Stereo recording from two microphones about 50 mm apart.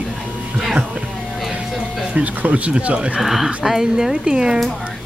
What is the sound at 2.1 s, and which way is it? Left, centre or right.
Speech, right.